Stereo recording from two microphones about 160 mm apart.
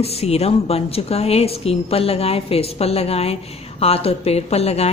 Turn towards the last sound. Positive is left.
turn(degrees=40)  # may be behind; listen again after turning